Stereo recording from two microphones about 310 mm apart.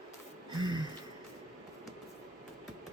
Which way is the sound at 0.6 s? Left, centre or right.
Centre.